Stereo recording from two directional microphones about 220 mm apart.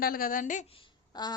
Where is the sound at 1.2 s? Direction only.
20° left (ahead or behind).